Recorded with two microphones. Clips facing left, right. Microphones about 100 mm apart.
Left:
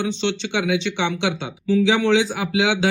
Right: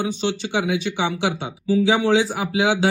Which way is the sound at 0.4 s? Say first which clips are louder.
Left 1 dB; 30° right (ahead or behind).